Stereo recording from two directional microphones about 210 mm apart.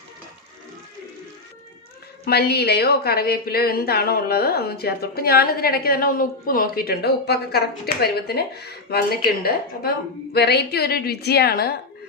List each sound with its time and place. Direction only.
2.2 s a woman's voice: 50° left (ahead or behind)